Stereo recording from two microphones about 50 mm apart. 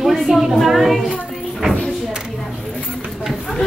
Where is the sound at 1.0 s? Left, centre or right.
Centre.